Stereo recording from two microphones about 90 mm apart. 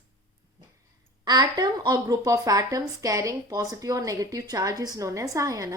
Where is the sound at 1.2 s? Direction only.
50° right (ahead or behind).